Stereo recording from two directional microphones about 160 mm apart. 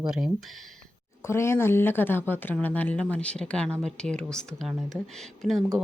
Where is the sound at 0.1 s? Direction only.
5° right (ahead or behind).